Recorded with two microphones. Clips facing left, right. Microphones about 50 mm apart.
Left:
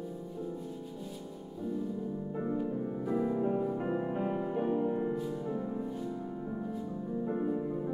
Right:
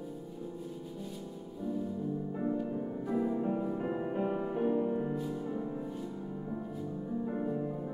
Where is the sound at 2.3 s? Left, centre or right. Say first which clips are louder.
Left 2 dB; centre.